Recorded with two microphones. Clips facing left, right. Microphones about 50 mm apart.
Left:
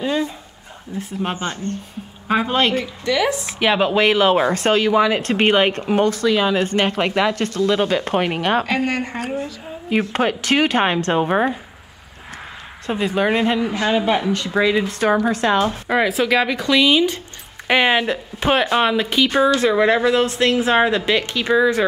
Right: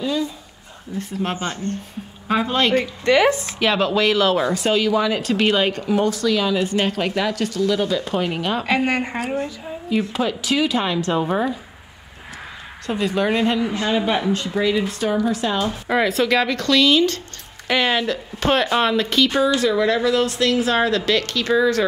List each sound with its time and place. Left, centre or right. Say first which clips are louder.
0.0 s dog: left 2 dB; left
0.9 s speech: even; centre
3.1 s speech: right 4 dB; right
3.4 s speech: left 2 dB; centre
4.6 s speech: left 3 dB; left
8.6 s a woman's voice: right 1 dB; centre
9.8 s a woman's voice: left 3 dB; left
12.8 s speech: left 1 dB; left
14.5 s a woman's voice: left 5 dB; left
15.9 s speech: right 1 dB; centre; by 18.5 s left
18.5 s speech: left 1 dB; centre
19.6 s speech: left 3 dB; left